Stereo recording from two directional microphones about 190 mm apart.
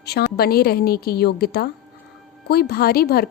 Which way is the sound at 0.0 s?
55° left (ahead or behind).